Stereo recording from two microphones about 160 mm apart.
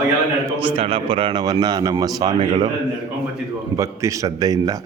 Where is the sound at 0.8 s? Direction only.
35° right (ahead or behind).